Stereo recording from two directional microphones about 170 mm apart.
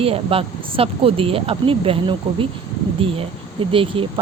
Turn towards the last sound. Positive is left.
turn(degrees=-30)  # may be behind; listen again after turning